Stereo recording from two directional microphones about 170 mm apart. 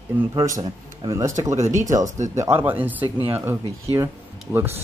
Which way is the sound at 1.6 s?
45° right (ahead or behind).